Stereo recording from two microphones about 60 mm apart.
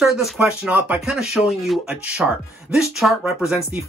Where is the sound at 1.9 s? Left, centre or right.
Centre.